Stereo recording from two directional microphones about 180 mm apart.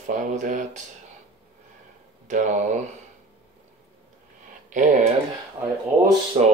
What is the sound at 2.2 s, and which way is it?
Speech, 45° right (ahead or behind).